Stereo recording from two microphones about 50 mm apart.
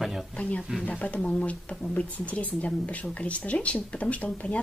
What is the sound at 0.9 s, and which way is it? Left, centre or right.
Speech, left.